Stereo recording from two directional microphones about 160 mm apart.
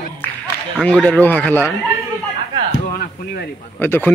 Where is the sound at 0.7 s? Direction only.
5° left (ahead or behind).